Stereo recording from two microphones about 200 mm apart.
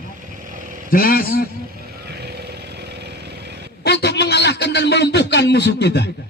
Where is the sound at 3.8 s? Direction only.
55° left (ahead or behind).